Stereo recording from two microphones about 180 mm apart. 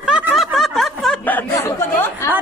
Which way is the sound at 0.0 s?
5° right (ahead or behind).